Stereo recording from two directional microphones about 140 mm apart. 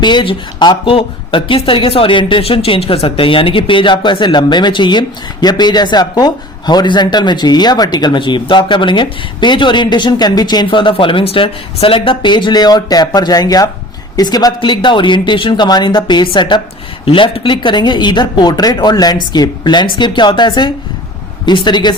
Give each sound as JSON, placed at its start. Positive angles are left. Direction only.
{"t": 0.0, "sound": "speech", "side_deg": 35}